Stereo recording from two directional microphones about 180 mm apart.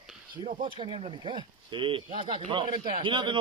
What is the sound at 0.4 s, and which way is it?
Speech, 25° right (ahead or behind).